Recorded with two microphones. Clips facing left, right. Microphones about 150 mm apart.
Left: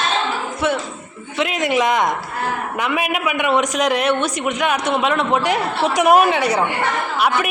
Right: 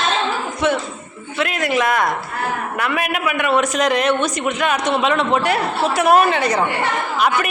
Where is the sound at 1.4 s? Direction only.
20° left (ahead or behind).